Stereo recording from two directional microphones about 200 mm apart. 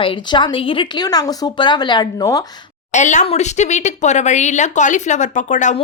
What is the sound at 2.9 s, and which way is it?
Speech, 35° left (ahead or behind).